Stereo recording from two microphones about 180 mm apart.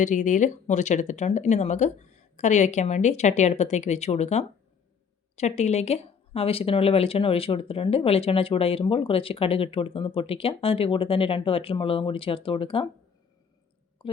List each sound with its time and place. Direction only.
0.0 s speech: 45° left (ahead or behind)